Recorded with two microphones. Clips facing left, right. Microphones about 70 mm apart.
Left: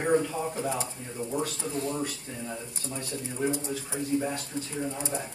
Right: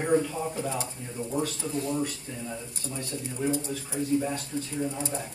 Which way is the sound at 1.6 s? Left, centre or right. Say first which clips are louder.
Even; left.